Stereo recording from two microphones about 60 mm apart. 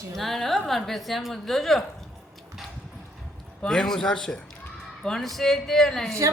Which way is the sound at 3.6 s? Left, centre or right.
Centre.